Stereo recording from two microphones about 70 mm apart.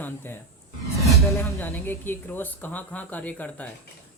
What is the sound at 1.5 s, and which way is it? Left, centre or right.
Speech, left.